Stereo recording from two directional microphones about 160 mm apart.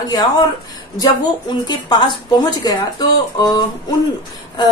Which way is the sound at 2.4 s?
25° left (ahead or behind).